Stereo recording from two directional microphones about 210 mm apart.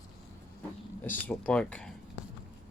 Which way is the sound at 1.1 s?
5° left (ahead or behind).